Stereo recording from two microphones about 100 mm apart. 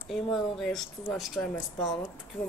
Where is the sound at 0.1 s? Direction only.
Centre (ahead or behind).